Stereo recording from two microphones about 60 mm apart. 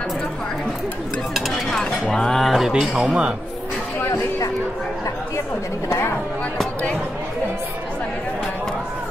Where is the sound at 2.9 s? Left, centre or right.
Centre.